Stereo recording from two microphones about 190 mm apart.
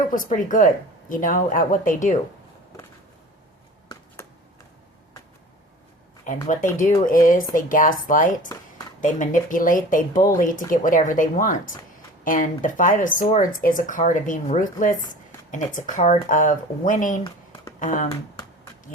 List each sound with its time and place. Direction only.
0.0 s speech: 45° left (ahead or behind)
6.8 s speech: 45° left (ahead or behind)